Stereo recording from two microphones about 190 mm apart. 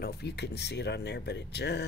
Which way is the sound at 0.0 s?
60° left (ahead or behind).